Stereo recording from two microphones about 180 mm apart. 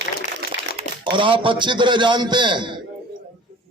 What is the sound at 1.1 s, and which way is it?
A man's voice, 30° right (ahead or behind).